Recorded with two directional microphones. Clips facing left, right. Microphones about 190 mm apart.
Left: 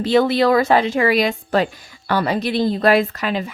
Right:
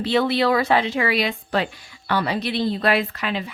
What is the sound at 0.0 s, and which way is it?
Speech, 45° left (ahead or behind).